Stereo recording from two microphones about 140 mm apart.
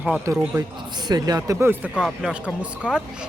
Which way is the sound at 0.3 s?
20° right (ahead or behind).